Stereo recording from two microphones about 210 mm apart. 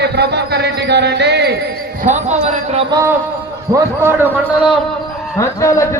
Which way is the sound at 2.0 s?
35° right (ahead or behind).